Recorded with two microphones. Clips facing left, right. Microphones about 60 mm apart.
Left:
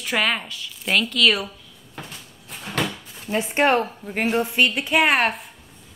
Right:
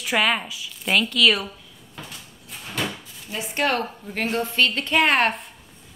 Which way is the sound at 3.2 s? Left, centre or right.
Left.